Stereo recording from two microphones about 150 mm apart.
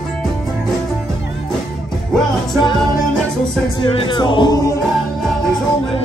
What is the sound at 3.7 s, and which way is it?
Music, 35° left (ahead or behind).